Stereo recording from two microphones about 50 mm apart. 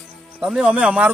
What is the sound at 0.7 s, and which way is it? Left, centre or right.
Speech, right.